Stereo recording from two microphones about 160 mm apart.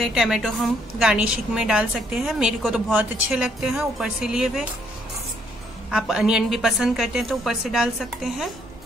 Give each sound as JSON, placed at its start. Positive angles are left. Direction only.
{"t": 0.0, "sound": "a woman's voice", "side_deg": -5}
{"t": 5.9, "sound": "a woman's voice", "side_deg": -5}